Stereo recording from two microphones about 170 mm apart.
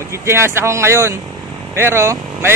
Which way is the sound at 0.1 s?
15° right (ahead or behind).